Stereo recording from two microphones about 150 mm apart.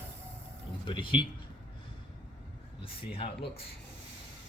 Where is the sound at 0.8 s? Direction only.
35° left (ahead or behind).